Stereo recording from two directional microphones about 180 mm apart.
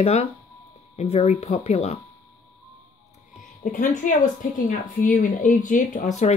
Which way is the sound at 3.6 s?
45° left (ahead or behind).